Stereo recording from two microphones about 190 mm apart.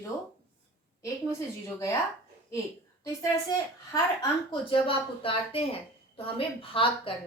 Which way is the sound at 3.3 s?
15° left (ahead or behind).